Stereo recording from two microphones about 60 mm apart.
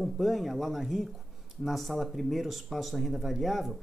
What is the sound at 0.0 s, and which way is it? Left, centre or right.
Speech, centre.